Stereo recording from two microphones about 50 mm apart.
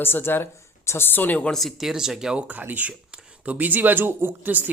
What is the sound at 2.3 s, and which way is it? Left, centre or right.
Speech, right.